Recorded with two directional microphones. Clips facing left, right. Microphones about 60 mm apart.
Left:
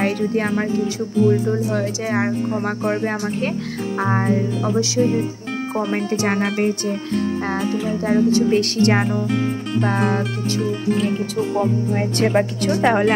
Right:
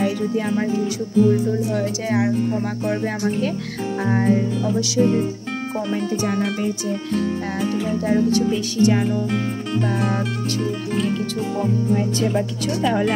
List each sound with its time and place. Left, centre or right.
0.0 s speech: left
1.7 s speech: left
4.0 s speech: left
5.9 s a woman's voice: left
8.5 s a woman's voice: left
9.3 s music: centre
9.8 s a woman's voice: left
10.6 s music: centre
11.9 s a woman's voice: left